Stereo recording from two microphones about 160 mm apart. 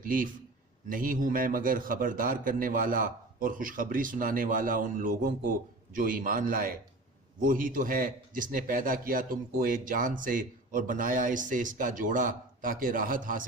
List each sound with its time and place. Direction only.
0.0 s a man's voice: 60° right (ahead or behind)